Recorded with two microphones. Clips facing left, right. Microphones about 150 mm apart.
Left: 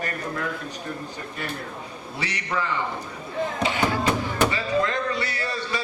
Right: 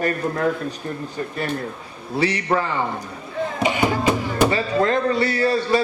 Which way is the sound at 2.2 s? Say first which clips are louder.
Right 9 dB; 40° right (ahead or behind).